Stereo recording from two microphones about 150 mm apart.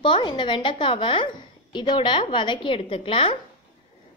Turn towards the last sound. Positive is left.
turn(degrees=35)  # may be behind; listen again after turning